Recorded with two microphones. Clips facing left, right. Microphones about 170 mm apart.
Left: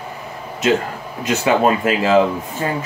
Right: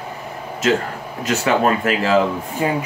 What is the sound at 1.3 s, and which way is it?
Speech, 20° left (ahead or behind).